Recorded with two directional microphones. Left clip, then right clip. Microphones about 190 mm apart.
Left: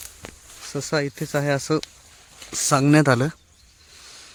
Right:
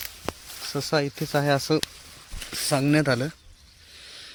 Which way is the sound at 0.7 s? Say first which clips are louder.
Left 1 dB; 25° left (ahead or behind).